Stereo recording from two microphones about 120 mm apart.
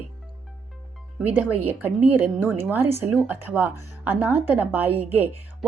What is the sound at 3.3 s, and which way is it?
Speech, 15° right (ahead or behind).